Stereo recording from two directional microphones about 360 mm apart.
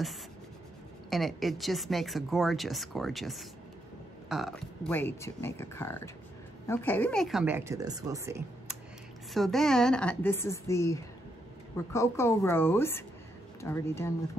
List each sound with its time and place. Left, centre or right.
1.1 s speech: centre